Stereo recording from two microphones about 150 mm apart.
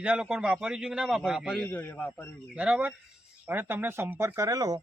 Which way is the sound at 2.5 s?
10° right (ahead or behind).